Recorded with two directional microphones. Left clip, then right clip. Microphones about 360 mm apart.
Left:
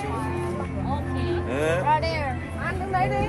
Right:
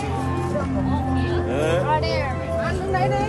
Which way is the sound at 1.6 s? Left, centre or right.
Left.